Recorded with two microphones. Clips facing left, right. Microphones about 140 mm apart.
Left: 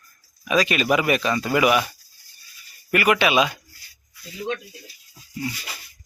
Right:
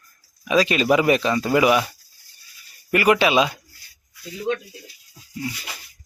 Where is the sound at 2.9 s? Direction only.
30° right (ahead or behind).